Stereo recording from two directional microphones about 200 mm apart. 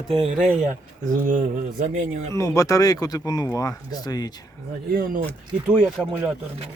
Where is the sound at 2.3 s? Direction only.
15° left (ahead or behind).